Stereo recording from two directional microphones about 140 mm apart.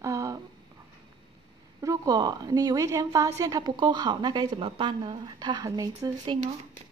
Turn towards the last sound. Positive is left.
turn(degrees=-25)  # may be behind; listen again after turning